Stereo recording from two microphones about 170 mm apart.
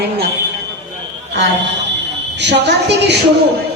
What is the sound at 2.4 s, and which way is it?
Speech, 85° right.